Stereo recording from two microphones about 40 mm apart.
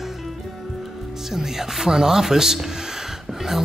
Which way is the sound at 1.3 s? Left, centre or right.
Centre.